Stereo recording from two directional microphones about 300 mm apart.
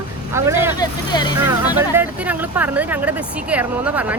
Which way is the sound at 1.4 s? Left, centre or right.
Centre.